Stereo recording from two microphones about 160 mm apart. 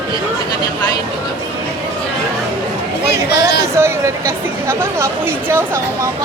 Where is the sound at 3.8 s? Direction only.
15° right (ahead or behind).